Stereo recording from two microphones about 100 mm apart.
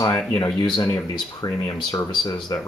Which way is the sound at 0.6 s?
45° left (ahead or behind).